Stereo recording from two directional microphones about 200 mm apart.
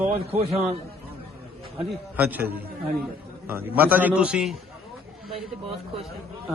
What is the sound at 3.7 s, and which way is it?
Speech, 10° right (ahead or behind).